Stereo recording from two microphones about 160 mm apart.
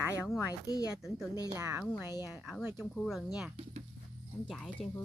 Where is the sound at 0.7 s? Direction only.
20° left (ahead or behind).